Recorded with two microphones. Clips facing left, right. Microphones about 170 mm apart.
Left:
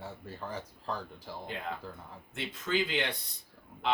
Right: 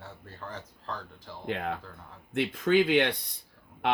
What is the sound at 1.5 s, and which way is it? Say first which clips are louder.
Speech: right 8 dB; 65° right (ahead or behind).